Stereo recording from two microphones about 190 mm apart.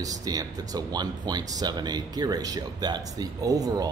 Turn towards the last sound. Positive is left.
turn(degrees=-20)  # may be behind; listen again after turning